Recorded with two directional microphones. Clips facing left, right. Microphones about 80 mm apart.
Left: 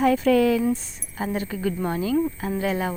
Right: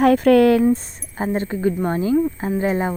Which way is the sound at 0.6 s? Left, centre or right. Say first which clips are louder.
Right 6 dB; right.